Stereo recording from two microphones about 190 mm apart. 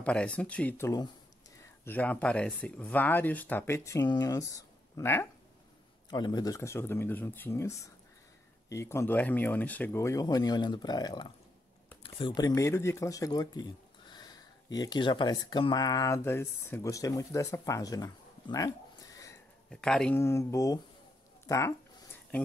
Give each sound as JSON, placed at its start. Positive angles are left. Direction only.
{"t": 0.0, "sound": "speech", "side_deg": 5}
{"t": 19.7, "sound": "speech", "side_deg": 5}